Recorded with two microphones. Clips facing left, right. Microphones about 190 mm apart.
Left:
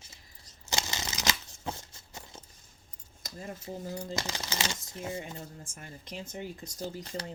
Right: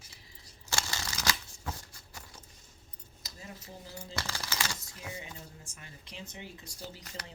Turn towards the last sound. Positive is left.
turn(degrees=30)  # may be behind; listen again after turning